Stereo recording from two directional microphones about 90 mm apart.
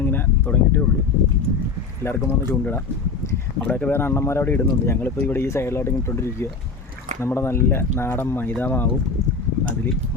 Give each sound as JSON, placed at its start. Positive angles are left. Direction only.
{"t": 0.0, "sound": "a sound", "side_deg": 25}
{"t": 2.0, "sound": "speech", "side_deg": 30}
{"t": 4.0, "sound": "speech", "side_deg": 30}